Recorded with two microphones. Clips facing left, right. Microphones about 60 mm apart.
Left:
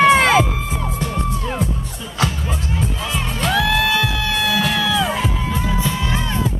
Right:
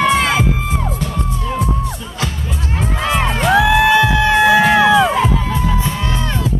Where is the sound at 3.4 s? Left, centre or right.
Right.